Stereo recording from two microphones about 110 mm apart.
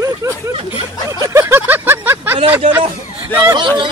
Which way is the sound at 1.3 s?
20° right (ahead or behind).